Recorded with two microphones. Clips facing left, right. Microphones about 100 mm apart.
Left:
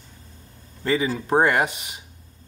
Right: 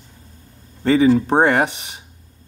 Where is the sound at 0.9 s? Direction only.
30° right (ahead or behind).